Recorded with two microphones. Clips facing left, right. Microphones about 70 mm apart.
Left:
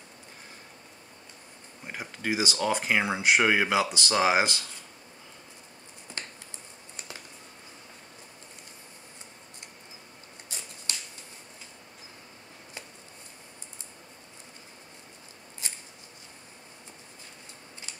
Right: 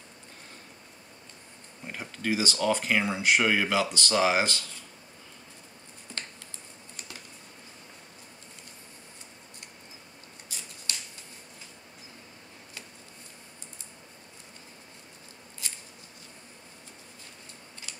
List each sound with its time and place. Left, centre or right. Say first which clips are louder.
1.9 s speech: right 1 dB; centre
6.1 s finger snapping: even; left
15.6 s scissors: left 1 dB; left